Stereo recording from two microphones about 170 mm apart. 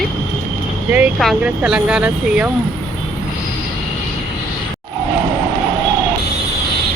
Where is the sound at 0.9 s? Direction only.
5° right (ahead or behind).